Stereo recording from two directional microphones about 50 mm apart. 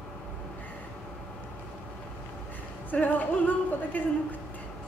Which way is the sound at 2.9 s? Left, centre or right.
Left.